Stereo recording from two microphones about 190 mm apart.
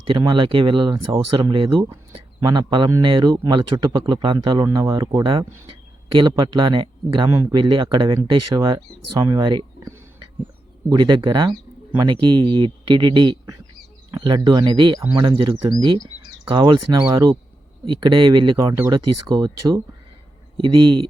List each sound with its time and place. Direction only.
0.1 s speech: 20° right (ahead or behind)